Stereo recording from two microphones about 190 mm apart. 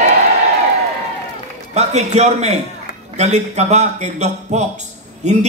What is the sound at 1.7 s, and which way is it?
A man's voice, 35° right (ahead or behind).